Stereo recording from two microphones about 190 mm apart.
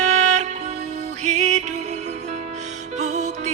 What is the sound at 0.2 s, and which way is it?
Music, 35° right (ahead or behind).